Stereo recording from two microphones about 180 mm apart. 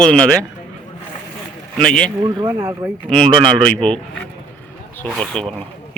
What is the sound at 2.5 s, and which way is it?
Speech, 10° right (ahead or behind).